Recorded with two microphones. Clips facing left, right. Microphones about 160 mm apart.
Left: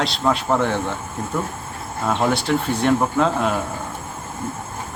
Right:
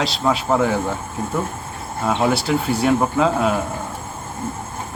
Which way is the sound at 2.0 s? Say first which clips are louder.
Right 1 dB; 5° right (ahead or behind).